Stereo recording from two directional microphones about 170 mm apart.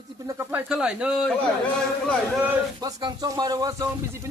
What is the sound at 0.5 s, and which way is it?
Speech, 5° right (ahead or behind).